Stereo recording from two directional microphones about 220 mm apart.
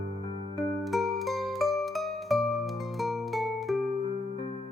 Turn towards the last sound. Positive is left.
turn(degrees=0)  # may be behind; listen again after turning